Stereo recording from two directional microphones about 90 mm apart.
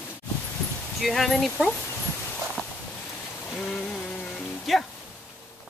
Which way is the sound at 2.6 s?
15° left (ahead or behind).